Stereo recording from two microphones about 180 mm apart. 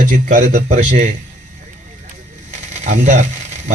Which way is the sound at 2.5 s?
40° right (ahead or behind).